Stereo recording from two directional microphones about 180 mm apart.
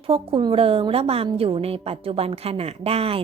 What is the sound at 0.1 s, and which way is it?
A woman's voice, 30° right (ahead or behind).